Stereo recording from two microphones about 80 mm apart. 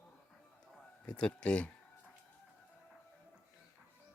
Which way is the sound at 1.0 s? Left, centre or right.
Centre.